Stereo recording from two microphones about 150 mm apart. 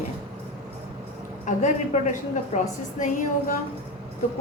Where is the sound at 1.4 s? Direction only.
55° left (ahead or behind).